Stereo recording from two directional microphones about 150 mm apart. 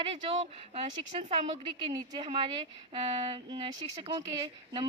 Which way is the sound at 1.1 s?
40° right (ahead or behind).